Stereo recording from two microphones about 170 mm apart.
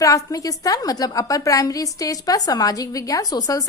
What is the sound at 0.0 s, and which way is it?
A woman's voice, 20° left (ahead or behind).